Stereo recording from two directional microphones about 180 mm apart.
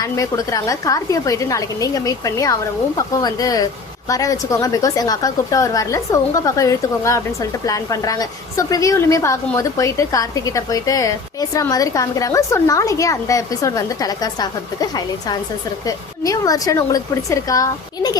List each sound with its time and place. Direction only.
0.0 s a woman's voice: 20° left (ahead or behind)